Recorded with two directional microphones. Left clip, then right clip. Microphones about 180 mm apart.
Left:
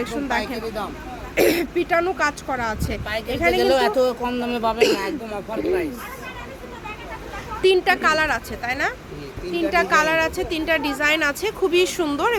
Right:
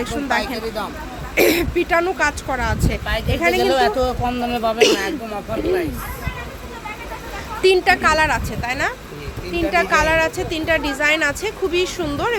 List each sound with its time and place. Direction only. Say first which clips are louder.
0.0 s speech: right 3 dB; centre (ahead or behind)
3.6 s speech: left 1 dB; 30° left (ahead or behind)
4.8 s speech: right 4 dB; 10° right (ahead or behind)
7.6 s a woman's voice: right 3 dB; 5° right (ahead or behind)
11.7 s speech: left 1 dB; 20° left (ahead or behind)